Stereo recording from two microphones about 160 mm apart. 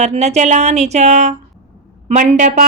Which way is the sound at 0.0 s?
45° right (ahead or behind).